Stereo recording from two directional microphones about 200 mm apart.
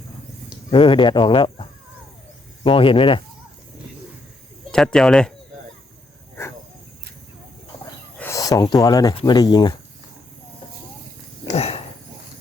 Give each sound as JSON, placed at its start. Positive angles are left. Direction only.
{"t": 0.7, "sound": "speech", "side_deg": 25}
{"t": 2.6, "sound": "speech", "side_deg": 25}
{"t": 4.7, "sound": "speech", "side_deg": 5}
{"t": 8.2, "sound": "speech", "side_deg": 15}
{"t": 11.5, "sound": "dog", "side_deg": 30}